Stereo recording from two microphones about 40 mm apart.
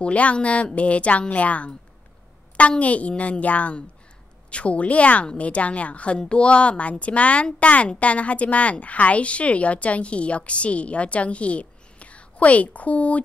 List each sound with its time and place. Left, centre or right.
0.0 s a woman's voice: left
2.8 s a woman's voice: left